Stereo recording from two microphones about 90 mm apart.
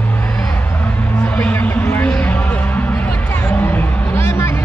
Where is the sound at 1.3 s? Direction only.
20° left (ahead or behind).